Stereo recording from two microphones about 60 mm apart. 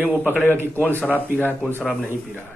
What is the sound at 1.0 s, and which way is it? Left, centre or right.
Speech, left.